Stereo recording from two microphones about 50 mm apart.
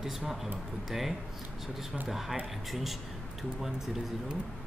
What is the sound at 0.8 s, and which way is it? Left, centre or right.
Speech, centre.